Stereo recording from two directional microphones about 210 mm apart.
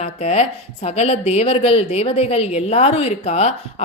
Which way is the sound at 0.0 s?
30° left (ahead or behind).